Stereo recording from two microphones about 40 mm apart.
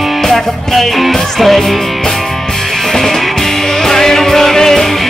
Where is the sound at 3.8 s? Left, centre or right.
Centre.